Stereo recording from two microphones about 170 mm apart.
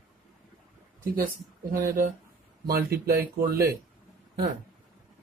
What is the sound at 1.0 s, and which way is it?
Speech, 55° right (ahead or behind).